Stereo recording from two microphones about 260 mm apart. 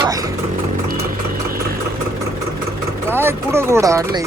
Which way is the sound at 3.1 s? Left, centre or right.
Centre.